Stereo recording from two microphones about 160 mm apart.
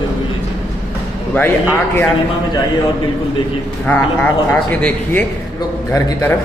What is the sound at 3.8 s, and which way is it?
Speech, 10° left (ahead or behind).